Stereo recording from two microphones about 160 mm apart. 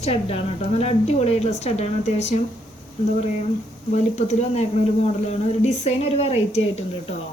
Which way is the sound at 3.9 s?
45° left (ahead or behind).